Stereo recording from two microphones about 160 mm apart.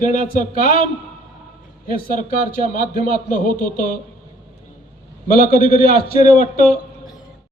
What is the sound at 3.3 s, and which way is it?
Speech, 60° left (ahead or behind).